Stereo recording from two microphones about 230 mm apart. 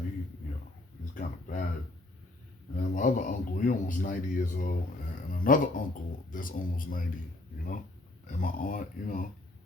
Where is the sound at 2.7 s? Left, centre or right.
Left.